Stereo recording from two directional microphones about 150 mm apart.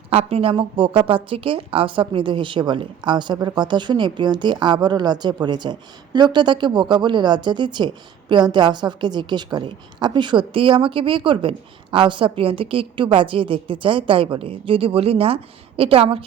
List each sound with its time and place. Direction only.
0.1 s a woman's voice: 40° right (ahead or behind)